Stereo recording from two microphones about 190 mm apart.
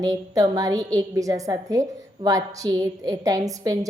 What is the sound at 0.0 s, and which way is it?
A woman's voice, 20° right (ahead or behind).